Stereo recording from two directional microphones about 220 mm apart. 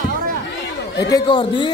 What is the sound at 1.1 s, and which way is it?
Speech, 20° left (ahead or behind).